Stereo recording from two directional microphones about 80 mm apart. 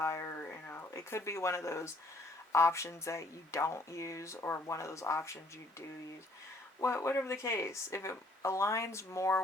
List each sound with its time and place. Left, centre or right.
0.0 s speech: left
0.3 s a sound: left
2.5 s speech: left
6.7 s speech: left